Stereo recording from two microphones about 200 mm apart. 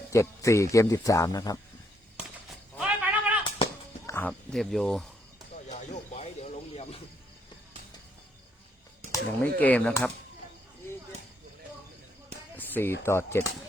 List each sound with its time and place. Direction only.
0.1 s speech: 15° left (ahead or behind)
2.7 s sheep: 5° right (ahead or behind)
4.0 s speech: 10° left (ahead or behind)
5.6 s snake: 35° left (ahead or behind)
9.6 s speech: 5° left (ahead or behind)
12.5 s speech: 10° left (ahead or behind)